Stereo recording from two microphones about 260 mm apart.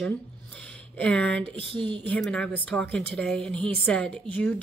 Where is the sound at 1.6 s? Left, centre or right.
Centre.